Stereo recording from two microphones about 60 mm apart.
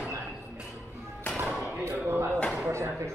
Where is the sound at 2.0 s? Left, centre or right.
Right.